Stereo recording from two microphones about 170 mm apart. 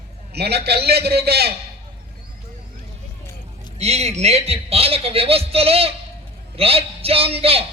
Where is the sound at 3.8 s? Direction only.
40° right (ahead or behind).